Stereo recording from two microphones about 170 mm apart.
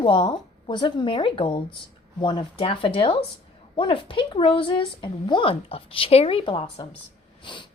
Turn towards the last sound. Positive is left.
turn(degrees=30)  # may be behind; listen again after turning